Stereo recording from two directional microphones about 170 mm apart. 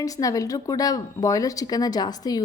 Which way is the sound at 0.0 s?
20° left (ahead or behind).